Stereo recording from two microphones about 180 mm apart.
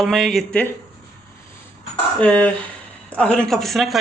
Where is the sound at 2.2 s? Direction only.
5° left (ahead or behind).